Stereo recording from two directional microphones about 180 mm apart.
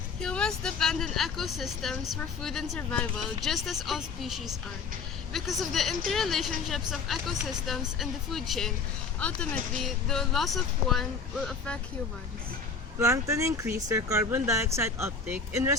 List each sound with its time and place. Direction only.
0.2 s speech: 5° left (ahead or behind)
13.0 s speech: 15° right (ahead or behind)